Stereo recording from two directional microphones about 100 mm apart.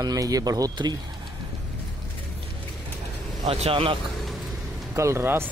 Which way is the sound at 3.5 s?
75° right (ahead or behind).